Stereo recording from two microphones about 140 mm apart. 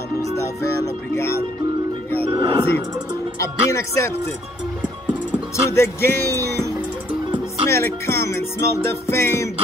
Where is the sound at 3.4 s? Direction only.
20° left (ahead or behind).